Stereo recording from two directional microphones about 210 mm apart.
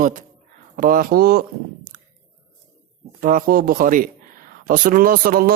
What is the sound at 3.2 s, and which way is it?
Speech, 40° right (ahead or behind).